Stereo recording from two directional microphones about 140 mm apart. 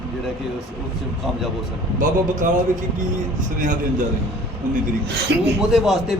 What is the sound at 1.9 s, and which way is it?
Speech, 65° right (ahead or behind).